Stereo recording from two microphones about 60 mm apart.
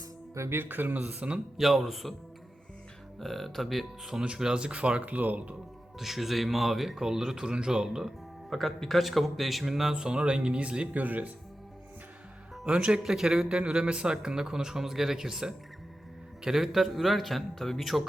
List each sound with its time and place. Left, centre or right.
0.3 s speech: right
0.6 s speech: right
1.5 s speech: centre
3.2 s speech: centre
4.2 s speech: centre
6.0 s speech: centre
8.4 s speech: centre
10.9 s speech: right
12.6 s a man's voice: centre